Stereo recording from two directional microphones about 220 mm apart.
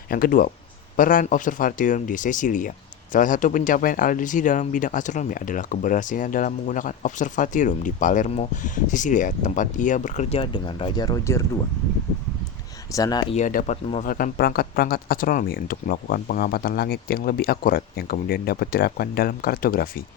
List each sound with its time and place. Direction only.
0.1 s speech: 40° left (ahead or behind); by 11.4 s 15° left (ahead or behind)
12.9 s speech: 15° left (ahead or behind)
13.3 s speech: 35° left (ahead or behind)